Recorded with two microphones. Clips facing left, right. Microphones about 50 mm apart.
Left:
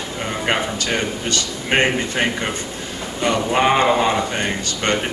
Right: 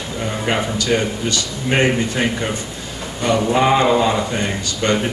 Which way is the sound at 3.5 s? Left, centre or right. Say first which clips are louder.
Right 1 dB; left.